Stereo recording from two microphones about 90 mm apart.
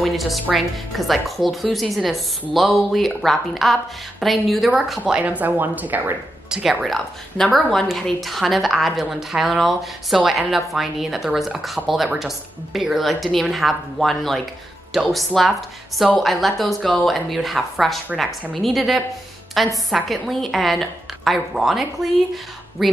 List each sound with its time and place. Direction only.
0.0 s speech: centre (ahead or behind)
5.0 s speech: 15° right (ahead or behind)
6.5 s speech: 5° right (ahead or behind)